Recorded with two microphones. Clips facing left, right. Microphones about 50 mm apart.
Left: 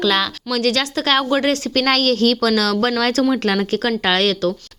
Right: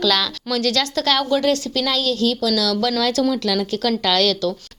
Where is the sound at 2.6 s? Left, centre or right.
Left.